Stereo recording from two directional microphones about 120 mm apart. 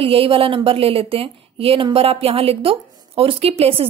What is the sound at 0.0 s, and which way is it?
A woman's voice, 50° right (ahead or behind).